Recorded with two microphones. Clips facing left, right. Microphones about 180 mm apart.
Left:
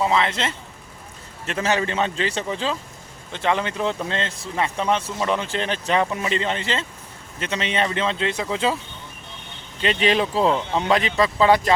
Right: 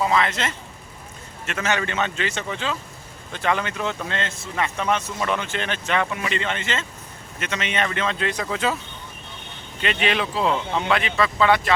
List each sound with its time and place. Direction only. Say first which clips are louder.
0.0 s speech: left 1 dB; 25° left (ahead or behind)
9.8 s speech: left 3 dB; 30° left (ahead or behind)